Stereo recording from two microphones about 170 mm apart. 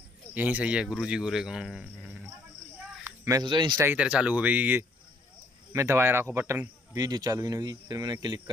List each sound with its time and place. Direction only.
0.3 s speech: 10° right (ahead or behind)
2.8 s a sound: 15° right (ahead or behind)
3.7 s speech: 10° right (ahead or behind)